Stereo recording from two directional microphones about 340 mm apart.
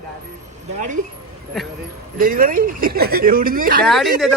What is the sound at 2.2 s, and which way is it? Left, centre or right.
Speech, right.